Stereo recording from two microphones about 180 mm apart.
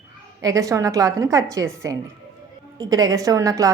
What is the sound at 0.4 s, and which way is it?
A woman's voice, 20° right (ahead or behind).